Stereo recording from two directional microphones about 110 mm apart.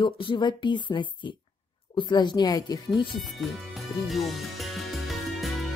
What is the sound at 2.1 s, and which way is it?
Speech, 40° left (ahead or behind).